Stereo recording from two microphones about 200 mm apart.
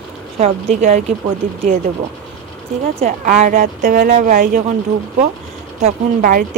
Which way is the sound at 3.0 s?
35° right (ahead or behind).